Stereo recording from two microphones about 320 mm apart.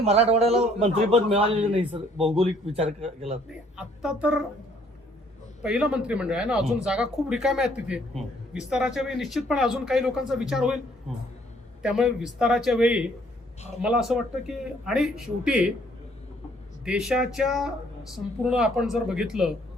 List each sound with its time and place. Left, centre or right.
0.0 s a man's voice: centre
3.8 s speech: centre
5.6 s speech: centre
11.8 s speech: centre
16.8 s speech: centre